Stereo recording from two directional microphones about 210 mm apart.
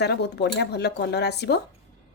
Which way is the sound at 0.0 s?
55° left (ahead or behind).